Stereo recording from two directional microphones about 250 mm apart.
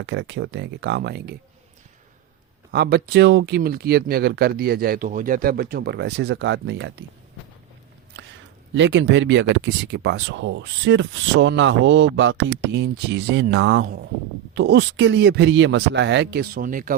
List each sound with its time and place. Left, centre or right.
0.0 s speech: right
2.7 s speech: right
8.1 s a sound: right
8.7 s speech: right